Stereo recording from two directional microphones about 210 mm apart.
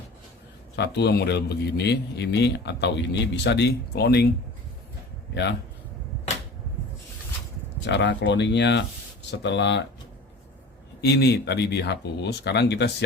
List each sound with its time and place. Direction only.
0.9 s a man's voice: 50° left (ahead or behind)
7.9 s speech: 55° left (ahead or behind)
11.0 s a man's voice: 50° left (ahead or behind)